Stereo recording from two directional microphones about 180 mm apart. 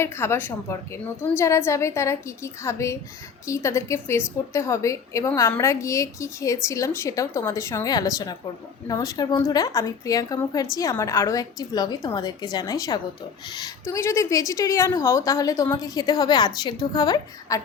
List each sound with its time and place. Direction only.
0.0 s a woman's voice: 15° left (ahead or behind)